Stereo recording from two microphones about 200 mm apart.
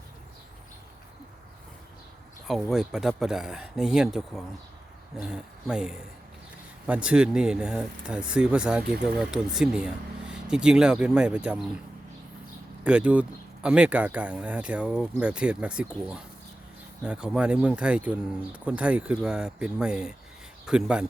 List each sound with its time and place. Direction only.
2.5 s speech: centre (ahead or behind)
12.8 s speech: 5° right (ahead or behind)